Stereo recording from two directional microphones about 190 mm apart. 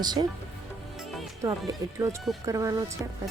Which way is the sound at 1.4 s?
15° right (ahead or behind).